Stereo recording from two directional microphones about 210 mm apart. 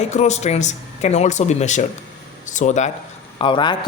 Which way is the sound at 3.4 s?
25° left (ahead or behind).